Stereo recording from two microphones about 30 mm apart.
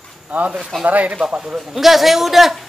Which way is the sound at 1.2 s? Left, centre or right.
Right.